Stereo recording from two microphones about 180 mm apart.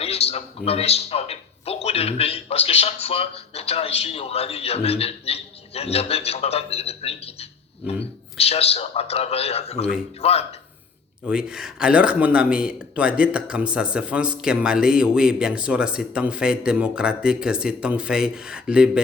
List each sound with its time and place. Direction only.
0.0 s a man's voice: 35° left (ahead or behind)
11.3 s speech: 5° right (ahead or behind)